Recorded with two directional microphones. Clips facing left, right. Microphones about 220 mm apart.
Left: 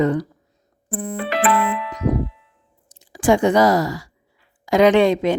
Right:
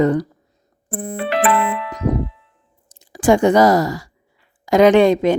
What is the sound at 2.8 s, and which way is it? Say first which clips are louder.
A woman's voice: right 2 dB; 45° right (ahead or behind).